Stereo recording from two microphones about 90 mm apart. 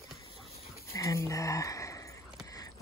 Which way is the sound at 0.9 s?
35° left (ahead or behind).